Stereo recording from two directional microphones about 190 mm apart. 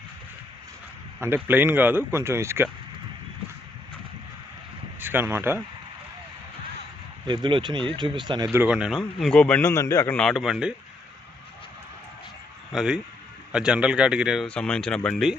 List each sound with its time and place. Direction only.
1.2 s speech: 10° right (ahead or behind)
4.9 s speech: 10° right (ahead or behind)
7.3 s speech: 25° right (ahead or behind)
8.4 s a man's voice: 10° right (ahead or behind)
12.7 s a man's voice: 5° right (ahead or behind)